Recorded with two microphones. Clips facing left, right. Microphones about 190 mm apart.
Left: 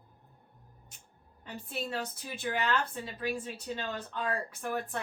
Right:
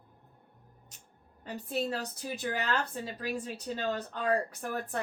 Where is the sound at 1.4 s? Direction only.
40° right (ahead or behind).